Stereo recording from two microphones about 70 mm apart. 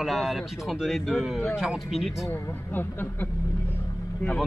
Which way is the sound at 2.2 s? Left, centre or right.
Left.